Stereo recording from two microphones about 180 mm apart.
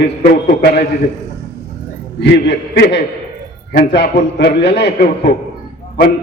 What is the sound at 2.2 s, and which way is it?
A man's voice, 65° left (ahead or behind).